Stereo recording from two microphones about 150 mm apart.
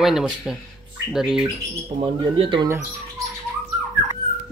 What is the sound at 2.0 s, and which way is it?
Speech, 35° right (ahead or behind).